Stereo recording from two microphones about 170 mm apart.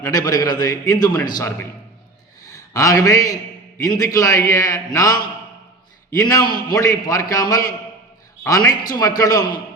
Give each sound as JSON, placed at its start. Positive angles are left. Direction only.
{"t": 0.0, "sound": "a man's voice", "side_deg": 20}
{"t": 2.7, "sound": "a man's voice", "side_deg": 20}